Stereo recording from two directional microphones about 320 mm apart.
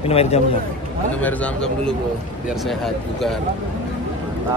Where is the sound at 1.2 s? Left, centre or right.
Centre.